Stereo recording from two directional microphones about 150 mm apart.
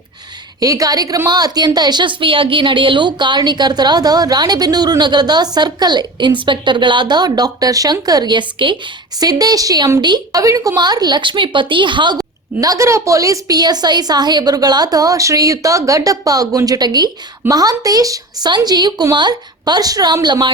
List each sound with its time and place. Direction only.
0.6 s speech: 25° right (ahead or behind)